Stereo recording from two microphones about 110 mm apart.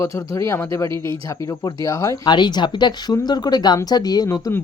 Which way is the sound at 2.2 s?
45° left (ahead or behind).